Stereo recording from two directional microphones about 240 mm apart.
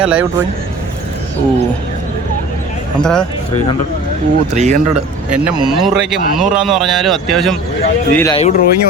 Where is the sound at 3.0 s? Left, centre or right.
Centre.